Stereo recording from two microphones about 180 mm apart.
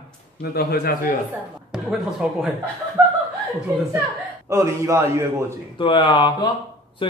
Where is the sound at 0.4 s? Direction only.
60° left (ahead or behind).